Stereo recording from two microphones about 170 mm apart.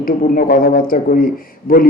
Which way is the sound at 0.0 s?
55° left (ahead or behind).